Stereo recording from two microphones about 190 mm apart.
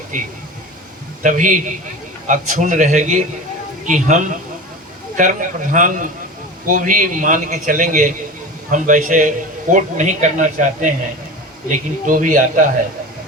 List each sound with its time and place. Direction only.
0.1 s speech: 45° right (ahead or behind)